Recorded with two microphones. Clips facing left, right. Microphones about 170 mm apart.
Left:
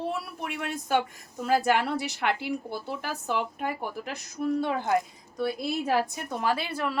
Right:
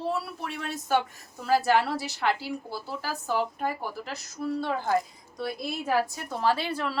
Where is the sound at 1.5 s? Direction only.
20° left (ahead or behind).